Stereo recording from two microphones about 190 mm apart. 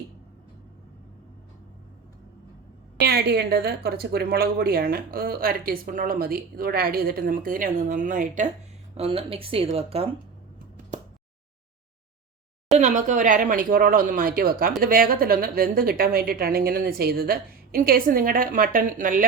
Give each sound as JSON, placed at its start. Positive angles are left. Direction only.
{"t": 3.0, "sound": "a woman's voice", "side_deg": -55}
{"t": 9.0, "sound": "speech", "side_deg": -30}
{"t": 12.7, "sound": "a woman's voice", "side_deg": -40}